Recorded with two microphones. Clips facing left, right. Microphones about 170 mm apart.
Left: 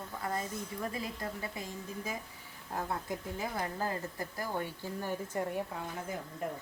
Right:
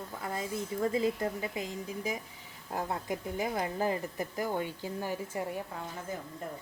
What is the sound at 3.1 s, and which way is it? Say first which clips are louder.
Speech: right 4 dB; 20° right (ahead or behind).